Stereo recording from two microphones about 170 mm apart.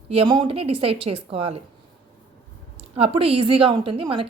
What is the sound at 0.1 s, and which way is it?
A woman's voice, 30° right (ahead or behind).